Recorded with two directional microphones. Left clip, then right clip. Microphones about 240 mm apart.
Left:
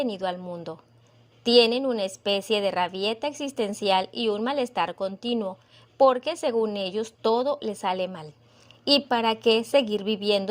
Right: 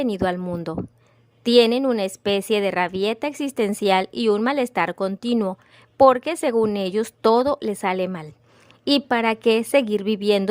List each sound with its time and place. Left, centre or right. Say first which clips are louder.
0.0 s a woman's voice: right 5 dB; right